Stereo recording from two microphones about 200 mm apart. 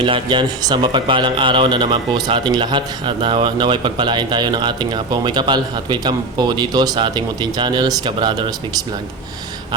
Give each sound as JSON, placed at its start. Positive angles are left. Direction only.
{"t": 0.0, "sound": "speech", "side_deg": -25}